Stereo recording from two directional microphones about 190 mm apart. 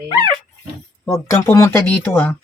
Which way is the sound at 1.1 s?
15° left (ahead or behind).